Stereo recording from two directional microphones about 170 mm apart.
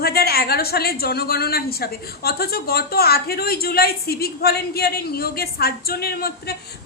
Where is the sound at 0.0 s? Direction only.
65° left (ahead or behind).